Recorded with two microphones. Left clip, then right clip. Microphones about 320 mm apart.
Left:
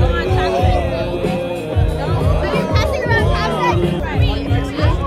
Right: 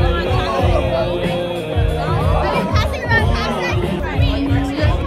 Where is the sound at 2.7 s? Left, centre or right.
Left.